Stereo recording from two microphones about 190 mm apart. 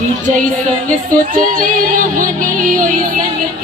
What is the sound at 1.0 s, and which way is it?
Music, 50° right (ahead or behind).